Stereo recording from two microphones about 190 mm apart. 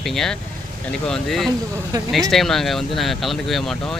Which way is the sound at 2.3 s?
Centre (ahead or behind).